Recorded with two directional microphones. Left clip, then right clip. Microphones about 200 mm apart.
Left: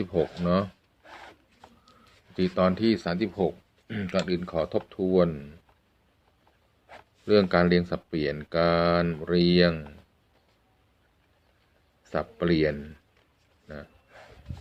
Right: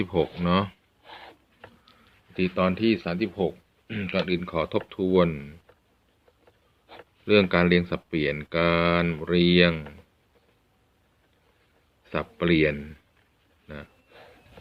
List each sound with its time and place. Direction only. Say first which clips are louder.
0.0 s speech: right 1 dB; 20° right (ahead or behind)
1.8 s a sound: even; 10° right (ahead or behind)
3.9 s speech: right 1 dB; 10° right (ahead or behind)
7.3 s speech: right 1 dB; 15° right (ahead or behind)
12.1 s speech: right 2 dB; 15° right (ahead or behind)